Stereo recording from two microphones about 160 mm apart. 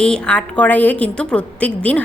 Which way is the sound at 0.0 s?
5° left (ahead or behind).